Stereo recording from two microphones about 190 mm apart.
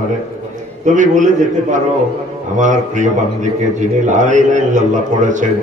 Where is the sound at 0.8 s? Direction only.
40° right (ahead or behind).